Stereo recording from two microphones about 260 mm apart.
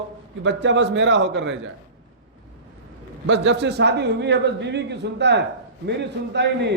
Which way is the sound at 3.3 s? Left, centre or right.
Right.